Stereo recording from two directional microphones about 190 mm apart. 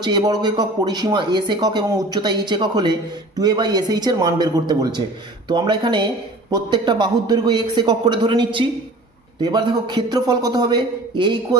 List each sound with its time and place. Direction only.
0.0 s speech: 20° right (ahead or behind)